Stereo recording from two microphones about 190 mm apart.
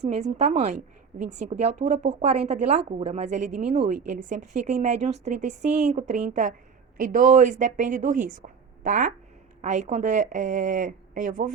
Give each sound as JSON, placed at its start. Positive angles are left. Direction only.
{"t": 0.1, "sound": "a woman's voice", "side_deg": -35}